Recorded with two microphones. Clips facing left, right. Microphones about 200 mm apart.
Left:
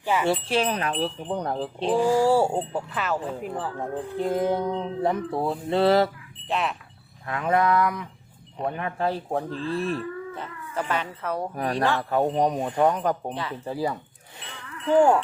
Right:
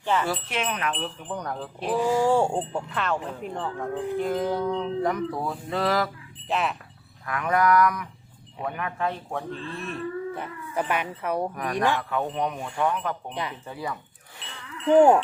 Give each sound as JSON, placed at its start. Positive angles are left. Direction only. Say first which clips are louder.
{"t": 0.0, "sound": "wind chime", "louder": "even", "side_deg": 10}
{"t": 0.3, "sound": "speech", "louder": "left 5 dB", "side_deg": 30}
{"t": 1.0, "sound": "music", "louder": "left 5 dB", "side_deg": 30}
{"t": 2.0, "sound": "speech", "louder": "left 1 dB", "side_deg": 10}
{"t": 3.8, "sound": "music", "louder": "right 4 dB", "side_deg": 25}
{"t": 6.5, "sound": "speech", "louder": "even", "side_deg": 0}
{"t": 7.3, "sound": "music", "louder": "even", "side_deg": 25}
{"t": 8.6, "sound": "speech", "louder": "left 3 dB", "side_deg": 30}
{"t": 10.3, "sound": "speech", "louder": "right 2 dB", "side_deg": -15}
{"t": 11.5, "sound": "speech", "louder": "left 1 dB", "side_deg": 30}
{"t": 14.8, "sound": "wind chime", "louder": "right 2 dB", "side_deg": -20}